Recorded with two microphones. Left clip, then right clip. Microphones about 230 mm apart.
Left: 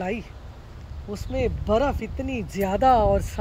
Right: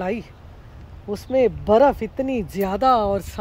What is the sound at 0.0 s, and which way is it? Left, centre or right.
Speech, centre.